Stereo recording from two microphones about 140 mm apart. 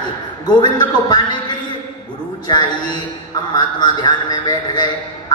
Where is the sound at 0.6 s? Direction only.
30° left (ahead or behind).